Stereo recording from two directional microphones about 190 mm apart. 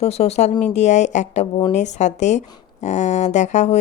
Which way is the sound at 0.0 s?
35° left (ahead or behind).